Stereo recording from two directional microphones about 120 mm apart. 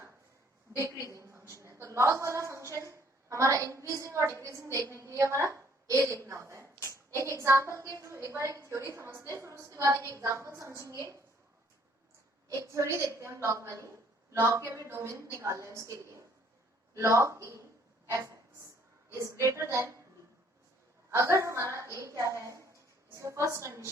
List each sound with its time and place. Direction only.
0.8 s a woman's voice: 25° right (ahead or behind)
12.5 s a woman's voice: 25° right (ahead or behind)
17.0 s a woman's voice: 25° right (ahead or behind)
19.2 s a woman's voice: 25° right (ahead or behind)
21.1 s a woman's voice: 25° right (ahead or behind)